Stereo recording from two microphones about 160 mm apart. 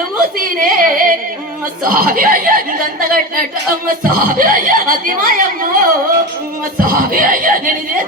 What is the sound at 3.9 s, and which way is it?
A woman's voice, 65° right (ahead or behind).